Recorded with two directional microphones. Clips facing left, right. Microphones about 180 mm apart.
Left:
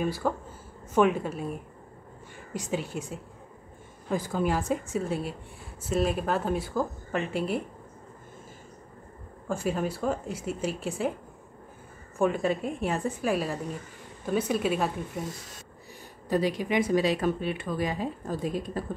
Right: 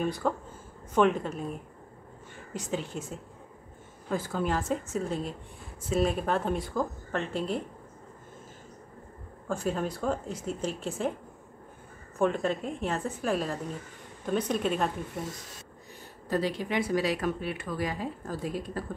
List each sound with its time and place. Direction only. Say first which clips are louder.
0.0 s a woman's voice: left 1 dB; 5° left (ahead or behind)
2.5 s a woman's voice: left 2 dB; 10° left (ahead or behind)
9.5 s speech: left 1 dB; 10° left (ahead or behind)
12.2 s a woman's voice: left 1 dB; 10° left (ahead or behind)
16.3 s speech: left 3 dB; 15° left (ahead or behind)